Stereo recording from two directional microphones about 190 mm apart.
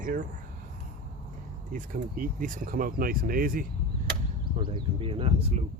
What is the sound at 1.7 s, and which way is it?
Speech, 45° right (ahead or behind).